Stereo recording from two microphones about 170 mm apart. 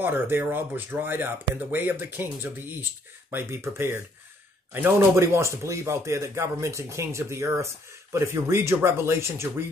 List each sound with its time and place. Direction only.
0.0 s speech: 10° right (ahead or behind)